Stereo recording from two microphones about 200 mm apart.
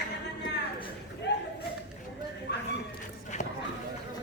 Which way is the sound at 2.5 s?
55° left (ahead or behind).